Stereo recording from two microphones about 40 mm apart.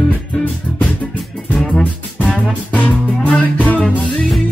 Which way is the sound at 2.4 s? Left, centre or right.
Left.